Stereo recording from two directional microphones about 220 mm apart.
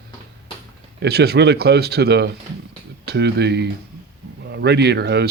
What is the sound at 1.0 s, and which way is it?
Speech, 45° right (ahead or behind).